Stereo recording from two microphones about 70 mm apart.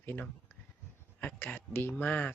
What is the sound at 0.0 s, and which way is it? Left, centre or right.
Speech, left.